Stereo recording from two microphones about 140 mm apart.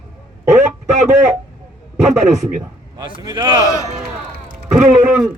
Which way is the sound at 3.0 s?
30° right (ahead or behind).